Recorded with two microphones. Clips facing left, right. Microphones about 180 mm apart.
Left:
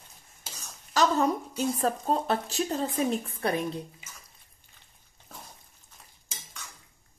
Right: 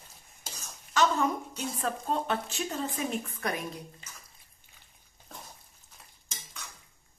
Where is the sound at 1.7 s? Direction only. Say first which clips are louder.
Left 2 dB; 35° left (ahead or behind).